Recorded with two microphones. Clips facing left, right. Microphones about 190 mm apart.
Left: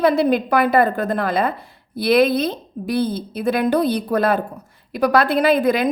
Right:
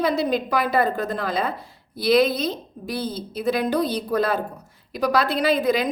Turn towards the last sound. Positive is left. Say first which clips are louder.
# left 4 dB
turn(degrees=55)  # may be behind; listen again after turning